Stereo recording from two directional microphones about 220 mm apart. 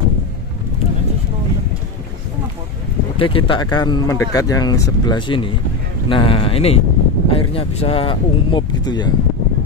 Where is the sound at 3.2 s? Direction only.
25° left (ahead or behind).